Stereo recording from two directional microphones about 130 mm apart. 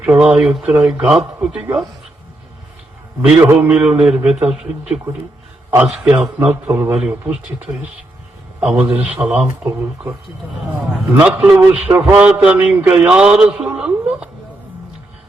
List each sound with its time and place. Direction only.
0.0 s a man's voice: 10° right (ahead or behind)
3.4 s a man's voice: 15° right (ahead or behind)
9.6 s speech: 25° right (ahead or behind)
11.1 s a man's voice: 5° right (ahead or behind)